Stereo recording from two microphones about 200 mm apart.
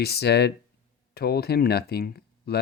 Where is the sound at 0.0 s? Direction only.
55° left (ahead or behind).